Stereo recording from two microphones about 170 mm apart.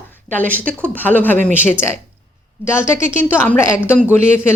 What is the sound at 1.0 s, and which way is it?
Speech, 10° left (ahead or behind).